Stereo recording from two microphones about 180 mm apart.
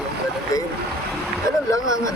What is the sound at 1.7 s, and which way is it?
Speech, 20° left (ahead or behind).